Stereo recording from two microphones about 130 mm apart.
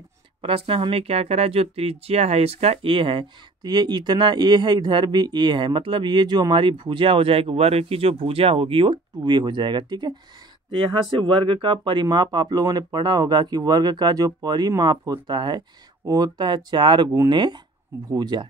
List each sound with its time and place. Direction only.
0.4 s speech: 45° right (ahead or behind)